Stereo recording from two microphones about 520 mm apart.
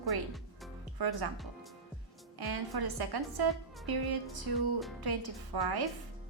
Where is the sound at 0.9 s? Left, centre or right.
Right.